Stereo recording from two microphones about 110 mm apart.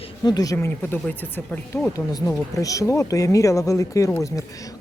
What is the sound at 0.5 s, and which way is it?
Speech, 20° left (ahead or behind).